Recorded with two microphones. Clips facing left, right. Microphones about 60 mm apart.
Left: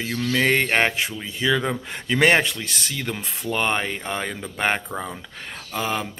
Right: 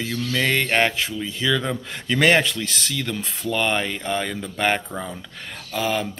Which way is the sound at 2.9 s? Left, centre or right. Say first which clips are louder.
Right 2 dB; left.